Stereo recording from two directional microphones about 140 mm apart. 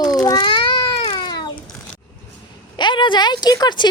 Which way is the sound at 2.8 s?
35° left (ahead or behind).